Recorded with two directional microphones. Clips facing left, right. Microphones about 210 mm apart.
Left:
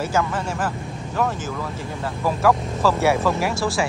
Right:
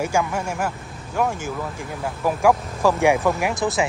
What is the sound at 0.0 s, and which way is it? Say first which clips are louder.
A woman's voice: even; 10° right (ahead or behind).